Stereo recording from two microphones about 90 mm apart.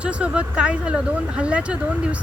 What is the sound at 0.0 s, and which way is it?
Speech, 15° right (ahead or behind).